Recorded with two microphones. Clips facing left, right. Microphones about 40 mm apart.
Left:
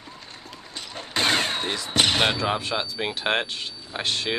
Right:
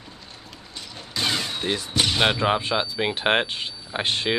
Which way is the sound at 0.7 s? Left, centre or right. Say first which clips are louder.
Left 3 dB; left.